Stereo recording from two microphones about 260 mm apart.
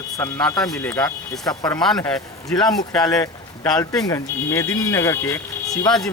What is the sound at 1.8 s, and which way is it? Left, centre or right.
Speech, centre.